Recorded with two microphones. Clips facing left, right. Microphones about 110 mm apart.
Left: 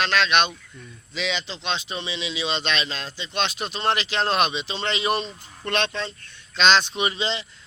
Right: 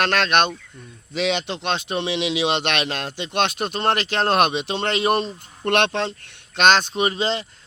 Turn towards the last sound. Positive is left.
turn(degrees=-45)  # may be behind; listen again after turning